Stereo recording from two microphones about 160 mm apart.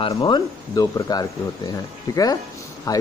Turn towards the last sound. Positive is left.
turn(degrees=20)  # may be behind; listen again after turning